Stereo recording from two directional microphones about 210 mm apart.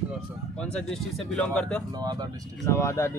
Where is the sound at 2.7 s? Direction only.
15° left (ahead or behind).